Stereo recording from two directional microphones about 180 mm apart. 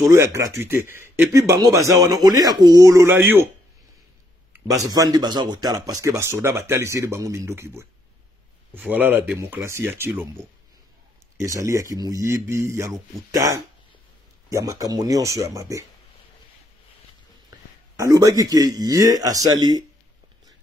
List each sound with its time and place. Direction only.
0.1 s speech: 15° right (ahead or behind)
4.5 s speech: 20° right (ahead or behind)
11.3 s a man's voice: 20° right (ahead or behind)
17.9 s a man's voice: 20° right (ahead or behind)